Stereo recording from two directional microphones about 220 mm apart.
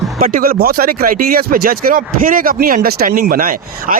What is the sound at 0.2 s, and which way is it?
Speech, 40° right (ahead or behind).